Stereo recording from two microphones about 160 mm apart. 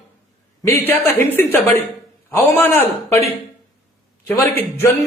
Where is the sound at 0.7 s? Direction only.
15° left (ahead or behind).